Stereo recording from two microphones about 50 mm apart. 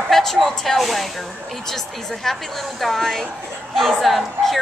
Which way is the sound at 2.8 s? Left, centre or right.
Centre.